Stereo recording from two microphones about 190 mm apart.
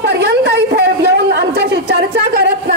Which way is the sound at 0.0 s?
60° right (ahead or behind).